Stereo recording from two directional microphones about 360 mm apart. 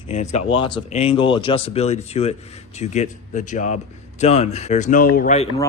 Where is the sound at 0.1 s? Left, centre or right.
Centre.